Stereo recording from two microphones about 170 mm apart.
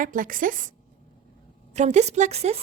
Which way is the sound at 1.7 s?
40° right (ahead or behind).